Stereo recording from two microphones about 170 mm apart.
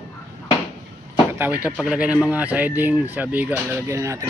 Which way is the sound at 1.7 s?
5° right (ahead or behind).